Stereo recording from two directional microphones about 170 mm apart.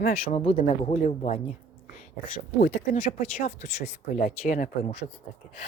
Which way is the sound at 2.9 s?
50° left (ahead or behind).